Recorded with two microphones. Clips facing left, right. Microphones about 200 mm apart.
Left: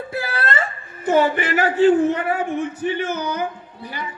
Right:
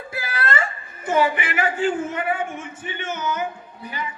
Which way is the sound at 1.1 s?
40° left (ahead or behind).